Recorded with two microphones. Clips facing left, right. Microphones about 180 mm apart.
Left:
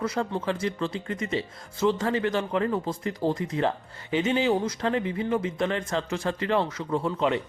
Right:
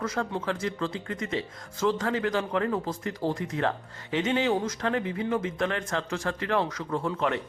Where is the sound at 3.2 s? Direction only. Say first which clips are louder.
Left 3 dB; 20° left (ahead or behind).